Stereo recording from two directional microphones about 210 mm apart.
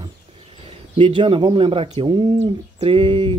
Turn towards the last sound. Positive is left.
turn(degrees=-25)  # may be behind; listen again after turning